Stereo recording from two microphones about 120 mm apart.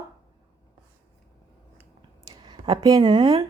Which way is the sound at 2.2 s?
40° right (ahead or behind).